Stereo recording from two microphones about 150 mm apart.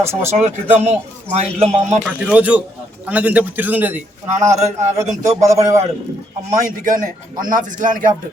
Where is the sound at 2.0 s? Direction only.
10° right (ahead or behind).